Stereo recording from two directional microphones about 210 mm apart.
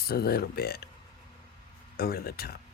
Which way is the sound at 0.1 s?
45° left (ahead or behind).